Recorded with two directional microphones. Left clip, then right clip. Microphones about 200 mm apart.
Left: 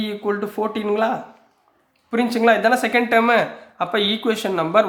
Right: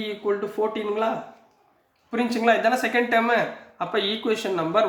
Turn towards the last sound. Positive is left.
turn(degrees=40)  # may be behind; listen again after turning